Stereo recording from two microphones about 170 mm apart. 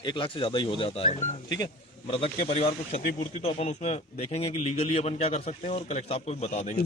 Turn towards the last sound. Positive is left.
turn(degrees=40)  # may be behind; listen again after turning